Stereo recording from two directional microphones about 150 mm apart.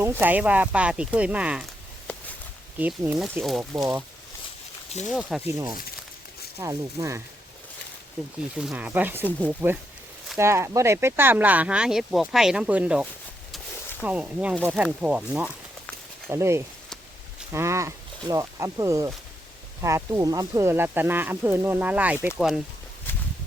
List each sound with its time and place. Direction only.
0.0 s speech: 15° right (ahead or behind)
2.7 s speech: 10° right (ahead or behind)
5.0 s speech: centre (ahead or behind)
5.5 s speech: 15° right (ahead or behind)
8.5 s speech: 5° right (ahead or behind)
23.1 s a sound: 15° left (ahead or behind)